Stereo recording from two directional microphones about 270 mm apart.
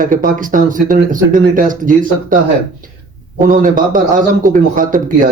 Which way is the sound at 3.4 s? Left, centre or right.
Right.